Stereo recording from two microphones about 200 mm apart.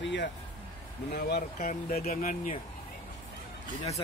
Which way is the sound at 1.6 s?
40° left (ahead or behind).